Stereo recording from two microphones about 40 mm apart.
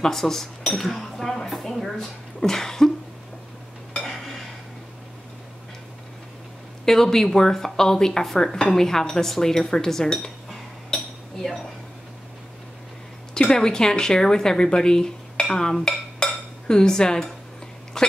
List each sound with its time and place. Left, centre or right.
0.0 s speech: centre
4.0 s dishes: centre
6.9 s speech: centre
13.3 s speech: centre
15.5 s dishes: centre
17.9 s speech: centre